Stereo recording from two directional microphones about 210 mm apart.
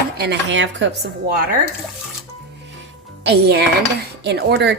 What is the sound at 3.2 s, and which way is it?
Music, 50° right (ahead or behind).